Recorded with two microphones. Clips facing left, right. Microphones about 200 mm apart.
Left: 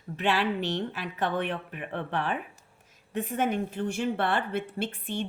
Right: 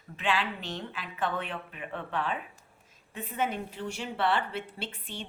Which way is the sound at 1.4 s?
70° left (ahead or behind).